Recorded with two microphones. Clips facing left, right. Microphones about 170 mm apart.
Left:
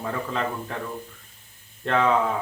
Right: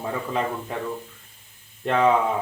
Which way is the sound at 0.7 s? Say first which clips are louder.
Right 3 dB; 15° right (ahead or behind).